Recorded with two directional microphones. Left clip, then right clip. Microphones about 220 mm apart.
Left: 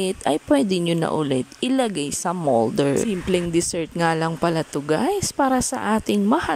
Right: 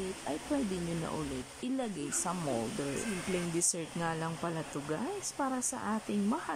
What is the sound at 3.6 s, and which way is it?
Speech, 45° left (ahead or behind).